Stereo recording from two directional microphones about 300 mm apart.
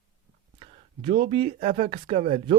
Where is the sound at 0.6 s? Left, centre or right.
Centre.